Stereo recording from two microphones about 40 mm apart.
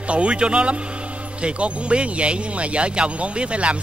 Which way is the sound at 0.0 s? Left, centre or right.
Right.